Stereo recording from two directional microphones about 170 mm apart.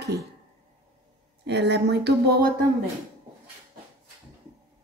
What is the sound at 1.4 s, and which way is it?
Speech, 85° right.